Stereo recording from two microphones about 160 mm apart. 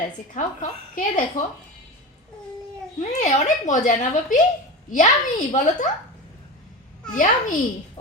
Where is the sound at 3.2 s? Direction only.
50° left (ahead or behind).